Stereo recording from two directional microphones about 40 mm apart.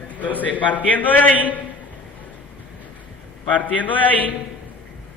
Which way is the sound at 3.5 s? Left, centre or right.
Left.